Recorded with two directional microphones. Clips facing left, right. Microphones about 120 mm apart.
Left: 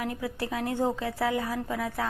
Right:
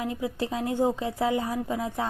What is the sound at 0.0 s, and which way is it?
Speech, 20° right (ahead or behind).